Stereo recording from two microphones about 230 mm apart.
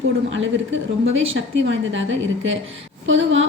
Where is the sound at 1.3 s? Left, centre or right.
Right.